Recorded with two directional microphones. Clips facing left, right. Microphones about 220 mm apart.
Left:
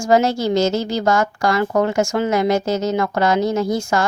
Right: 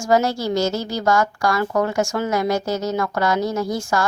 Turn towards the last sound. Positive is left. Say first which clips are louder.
# left 3 dB
turn(degrees=20)  # may be behind; listen again after turning